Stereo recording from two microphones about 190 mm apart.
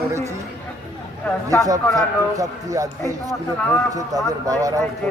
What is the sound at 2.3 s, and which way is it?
Speech, 15° right (ahead or behind).